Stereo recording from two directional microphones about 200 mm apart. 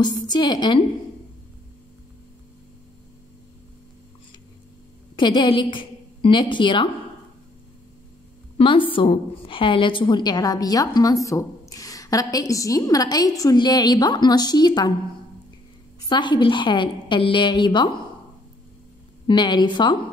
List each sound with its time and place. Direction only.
0.0 s a woman's voice: 20° left (ahead or behind)
5.1 s a woman's voice: 25° left (ahead or behind)
8.5 s a woman's voice: 25° left (ahead or behind)
16.1 s a woman's voice: 20° left (ahead or behind)
19.2 s a woman's voice: 20° left (ahead or behind)